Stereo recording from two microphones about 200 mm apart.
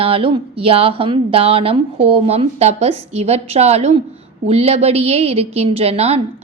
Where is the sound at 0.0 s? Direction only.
30° right (ahead or behind).